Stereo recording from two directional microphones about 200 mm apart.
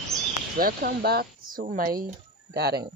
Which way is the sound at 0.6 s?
45° right (ahead or behind).